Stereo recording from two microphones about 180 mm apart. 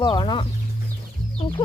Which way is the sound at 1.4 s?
30° left (ahead or behind).